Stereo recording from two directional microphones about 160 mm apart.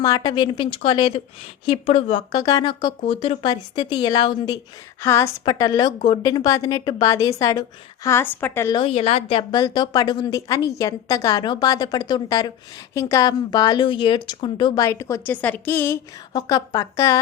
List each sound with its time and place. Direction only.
0.0 s a woman's voice: 25° left (ahead or behind); by 2.2 s 40° left (ahead or behind)
2.3 s a woman's voice: 25° left (ahead or behind)
8.7 s a woman's voice: 35° left (ahead or behind)
9.5 s a woman's voice: 25° left (ahead or behind)
14.8 s a woman's voice: 15° left (ahead or behind)